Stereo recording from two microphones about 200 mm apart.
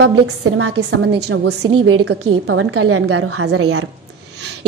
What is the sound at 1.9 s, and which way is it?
A woman's voice, 85° right.